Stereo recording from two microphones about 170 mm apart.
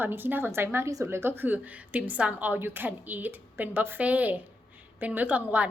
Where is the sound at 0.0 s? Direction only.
10° right (ahead or behind).